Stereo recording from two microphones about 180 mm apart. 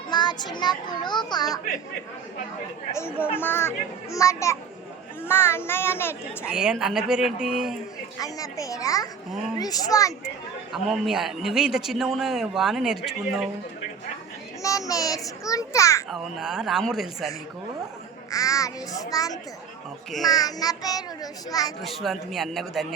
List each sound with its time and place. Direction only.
0.1 s a child's voice: 25° left (ahead or behind)
3.3 s a child's voice: 10° left (ahead or behind)
6.4 s a man's voice: 5° right (ahead or behind)
8.2 s a child's voice: 20° left (ahead or behind)
10.7 s a man's voice: centre (ahead or behind)
14.6 s a child's voice: 20° left (ahead or behind)
16.0 s a man's voice: centre (ahead or behind)
18.3 s a child's voice: 20° left (ahead or behind)
21.8 s a man's voice: centre (ahead or behind)